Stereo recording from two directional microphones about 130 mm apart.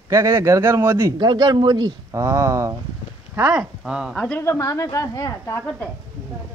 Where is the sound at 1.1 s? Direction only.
35° right (ahead or behind).